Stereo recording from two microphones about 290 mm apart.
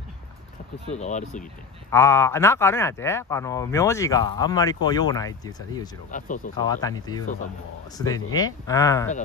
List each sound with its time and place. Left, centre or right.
0.8 s speech: left
1.9 s speech: centre
6.1 s speech: left
6.5 s speech: centre